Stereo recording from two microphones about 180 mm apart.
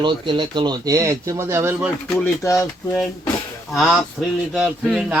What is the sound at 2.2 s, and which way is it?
Speech, 15° left (ahead or behind).